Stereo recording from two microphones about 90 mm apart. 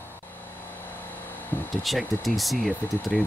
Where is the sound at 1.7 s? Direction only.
Centre (ahead or behind).